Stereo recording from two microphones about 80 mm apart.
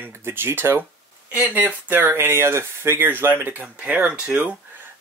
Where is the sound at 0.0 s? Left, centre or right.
Right.